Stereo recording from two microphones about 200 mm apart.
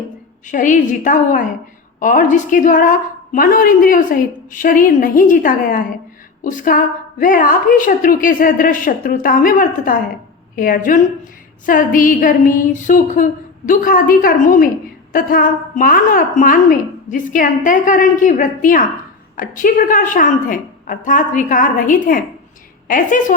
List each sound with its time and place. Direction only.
0.4 s a woman's voice: 40° left (ahead or behind)